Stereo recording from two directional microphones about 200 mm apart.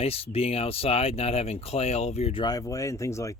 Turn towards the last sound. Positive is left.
turn(degrees=15)  # may be behind; listen again after turning